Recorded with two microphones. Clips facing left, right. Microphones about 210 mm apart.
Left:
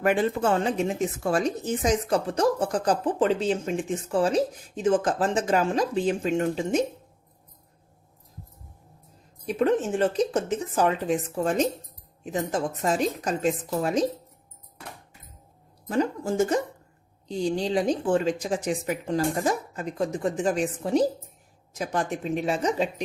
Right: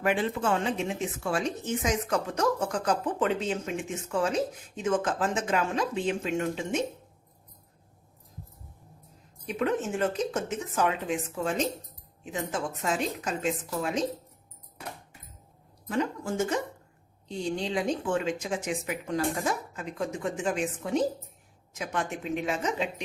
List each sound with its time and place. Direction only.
0.0 s speech: 45° left (ahead or behind)
9.6 s speech: 35° left (ahead or behind)
15.9 s speech: 35° left (ahead or behind)